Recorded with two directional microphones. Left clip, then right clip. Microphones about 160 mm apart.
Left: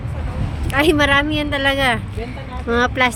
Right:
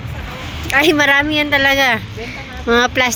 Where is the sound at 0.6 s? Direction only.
20° right (ahead or behind).